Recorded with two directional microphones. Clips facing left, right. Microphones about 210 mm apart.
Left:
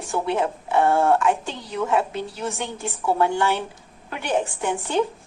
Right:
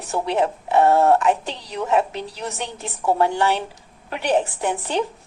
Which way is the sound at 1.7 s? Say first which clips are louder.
Right 2 dB; 20° right (ahead or behind).